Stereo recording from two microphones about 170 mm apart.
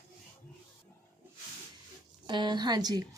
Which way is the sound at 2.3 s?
25° right (ahead or behind).